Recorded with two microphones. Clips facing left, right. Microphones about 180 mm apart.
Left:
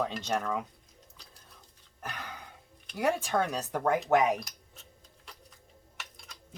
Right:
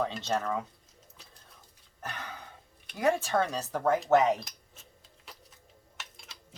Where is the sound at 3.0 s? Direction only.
15° left (ahead or behind).